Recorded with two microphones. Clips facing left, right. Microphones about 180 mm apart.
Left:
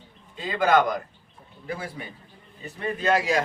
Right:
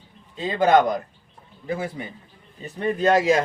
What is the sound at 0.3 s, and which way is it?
Speech, 25° right (ahead or behind).